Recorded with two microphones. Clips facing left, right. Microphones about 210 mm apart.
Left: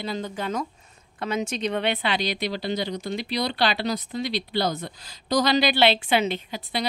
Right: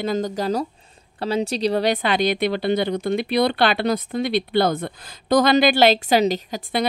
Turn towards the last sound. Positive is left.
turn(degrees=-45)  # may be behind; listen again after turning